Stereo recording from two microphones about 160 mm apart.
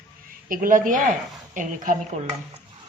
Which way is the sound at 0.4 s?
60° right (ahead or behind).